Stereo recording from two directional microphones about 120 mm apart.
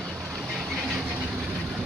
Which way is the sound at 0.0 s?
Centre (ahead or behind).